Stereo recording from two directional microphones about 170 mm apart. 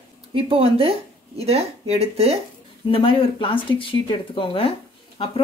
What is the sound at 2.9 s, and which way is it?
Speech, 30° left (ahead or behind).